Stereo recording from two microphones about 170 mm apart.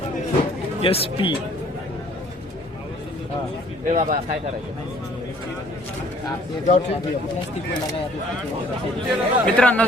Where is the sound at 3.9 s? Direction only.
55° right (ahead or behind).